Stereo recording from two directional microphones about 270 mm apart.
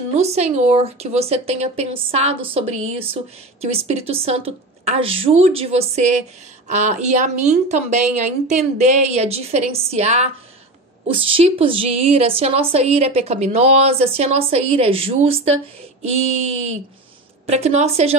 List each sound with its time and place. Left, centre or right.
0.1 s a woman's voice: right
17.5 s a woman's voice: right